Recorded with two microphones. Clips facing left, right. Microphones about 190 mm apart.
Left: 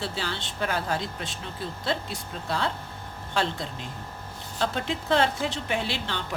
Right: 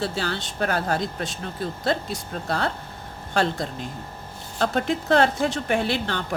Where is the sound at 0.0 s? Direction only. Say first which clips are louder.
Right 5 dB; 45° right (ahead or behind).